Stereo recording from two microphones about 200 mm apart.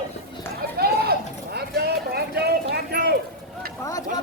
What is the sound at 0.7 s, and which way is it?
Clip-clop, 50° right (ahead or behind).